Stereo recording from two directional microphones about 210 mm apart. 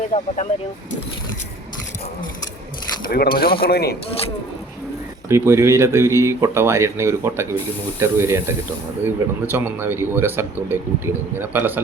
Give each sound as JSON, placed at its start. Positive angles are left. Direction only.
{"t": 0.1, "sound": "speech", "side_deg": 40}
{"t": 3.1, "sound": "speech", "side_deg": 45}
{"t": 5.3, "sound": "speech", "side_deg": -10}